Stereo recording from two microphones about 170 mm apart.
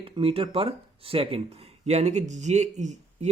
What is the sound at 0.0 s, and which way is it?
Speech, 35° right (ahead or behind).